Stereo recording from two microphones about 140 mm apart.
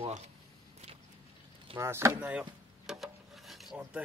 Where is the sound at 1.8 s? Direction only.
20° right (ahead or behind).